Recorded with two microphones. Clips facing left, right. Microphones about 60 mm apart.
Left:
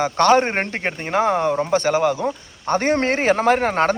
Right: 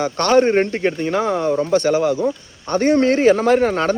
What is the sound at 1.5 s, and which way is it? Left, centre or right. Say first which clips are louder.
Speech: right 2 dB; left.